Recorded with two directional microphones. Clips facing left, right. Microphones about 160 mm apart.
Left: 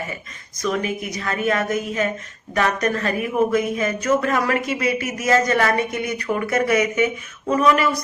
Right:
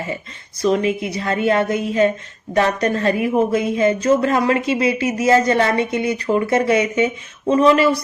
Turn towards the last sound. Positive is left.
turn(degrees=-30)  # may be behind; listen again after turning